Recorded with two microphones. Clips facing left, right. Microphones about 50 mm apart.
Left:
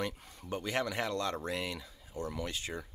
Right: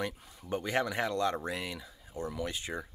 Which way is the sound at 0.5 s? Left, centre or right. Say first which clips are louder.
Right 3 dB; right.